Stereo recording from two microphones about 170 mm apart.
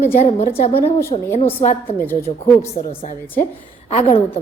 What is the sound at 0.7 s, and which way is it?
Speech, 15° left (ahead or behind).